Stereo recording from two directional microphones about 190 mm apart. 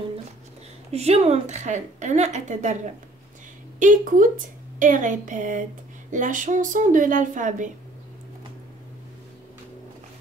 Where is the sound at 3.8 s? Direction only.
45° right (ahead or behind).